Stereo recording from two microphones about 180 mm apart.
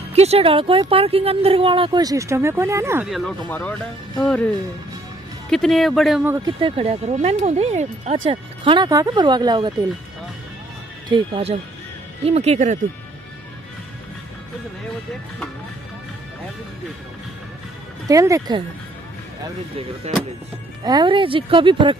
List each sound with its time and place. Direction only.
0.1 s speech: 35° right (ahead or behind); by 3.1 s 15° right (ahead or behind)
3.1 s speech: centre (ahead or behind)
5.5 s speech: centre (ahead or behind)
6.4 s speech: 30° right (ahead or behind)
11.1 s speech: 30° right (ahead or behind)
18.0 s speech: 20° right (ahead or behind)
20.8 s speech: 25° right (ahead or behind)